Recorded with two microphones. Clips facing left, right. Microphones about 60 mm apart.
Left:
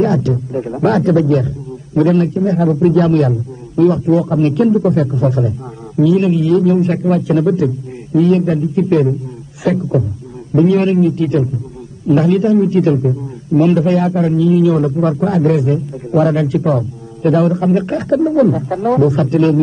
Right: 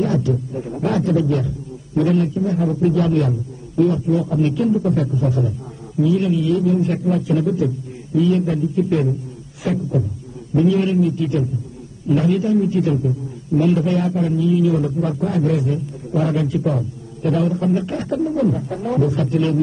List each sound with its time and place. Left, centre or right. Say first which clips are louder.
0.0 s a man's voice: left 5 dB; left
5.9 s a man's voice: left 5 dB; left
10.5 s a man's voice: left 5 dB; left